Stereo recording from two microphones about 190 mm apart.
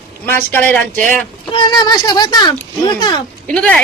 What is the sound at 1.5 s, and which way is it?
Speech, 25° left (ahead or behind).